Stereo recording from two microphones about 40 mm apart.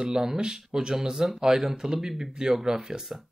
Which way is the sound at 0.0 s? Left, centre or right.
Centre.